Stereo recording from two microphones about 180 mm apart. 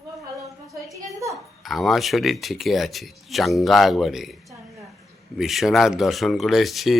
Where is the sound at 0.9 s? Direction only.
20° right (ahead or behind).